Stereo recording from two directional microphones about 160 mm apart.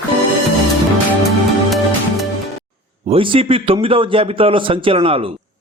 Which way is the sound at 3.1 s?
35° right (ahead or behind).